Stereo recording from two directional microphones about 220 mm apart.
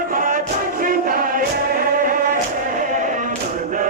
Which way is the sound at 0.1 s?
40° right (ahead or behind).